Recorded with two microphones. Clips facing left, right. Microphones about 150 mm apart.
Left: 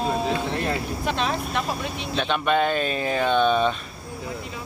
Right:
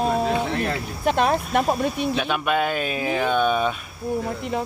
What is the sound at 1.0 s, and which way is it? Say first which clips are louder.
Speech: right 8 dB; 50° right (ahead or behind).